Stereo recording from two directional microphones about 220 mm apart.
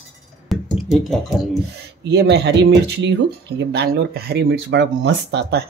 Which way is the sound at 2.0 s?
50° right (ahead or behind).